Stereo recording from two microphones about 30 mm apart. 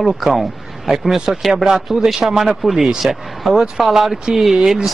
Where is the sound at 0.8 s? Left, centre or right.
Centre.